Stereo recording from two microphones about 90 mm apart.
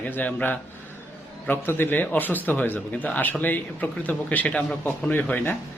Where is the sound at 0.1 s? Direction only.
15° left (ahead or behind).